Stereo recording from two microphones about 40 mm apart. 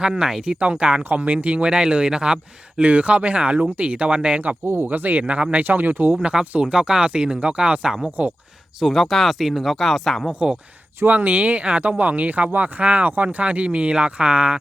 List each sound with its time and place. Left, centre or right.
0.0 s speech: centre
0.6 s speech: right
4.6 s speech: right
4.9 s speech: right
5.2 s speech: right
5.6 s speech: right
6.4 s speech: right
6.7 s speech: right
8.2 s speech: right
8.8 s speech: centre
11.1 s speech: right